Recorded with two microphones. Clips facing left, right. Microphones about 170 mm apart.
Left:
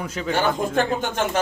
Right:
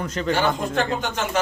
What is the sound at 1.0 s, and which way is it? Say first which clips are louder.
Speech: left 2 dB; 50° left (ahead or behind).